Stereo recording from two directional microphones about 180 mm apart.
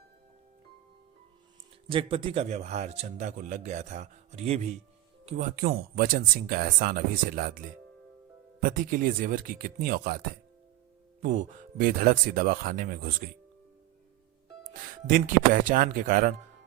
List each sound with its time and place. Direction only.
1.9 s a man's voice: 30° right (ahead or behind)
5.5 s speech: 55° right (ahead or behind)
8.6 s speech: 50° right (ahead or behind)
11.2 s speech: 45° right (ahead or behind)
14.9 s speech: 50° right (ahead or behind)